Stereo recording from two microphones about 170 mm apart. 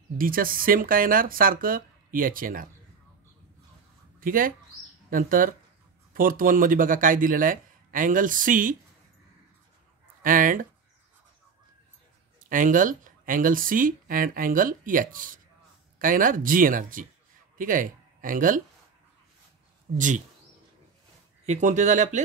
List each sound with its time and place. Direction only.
0.2 s speech: 55° right (ahead or behind)
4.2 s speech: 55° right (ahead or behind)
10.2 s speech: 55° right (ahead or behind)
12.4 s speech: 50° right (ahead or behind)
21.5 s speech: 45° right (ahead or behind)